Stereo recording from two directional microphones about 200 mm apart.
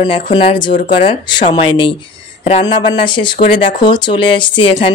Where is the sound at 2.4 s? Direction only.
35° left (ahead or behind).